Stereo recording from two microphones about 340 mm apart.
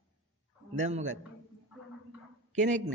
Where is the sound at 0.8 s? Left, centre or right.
Centre.